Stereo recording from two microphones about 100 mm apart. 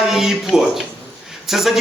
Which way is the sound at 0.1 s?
5° right (ahead or behind).